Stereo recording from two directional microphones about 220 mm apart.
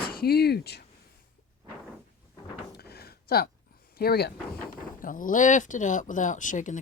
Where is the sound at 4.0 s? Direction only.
45° left (ahead or behind).